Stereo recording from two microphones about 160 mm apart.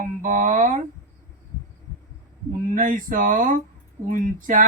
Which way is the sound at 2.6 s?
55° right (ahead or behind).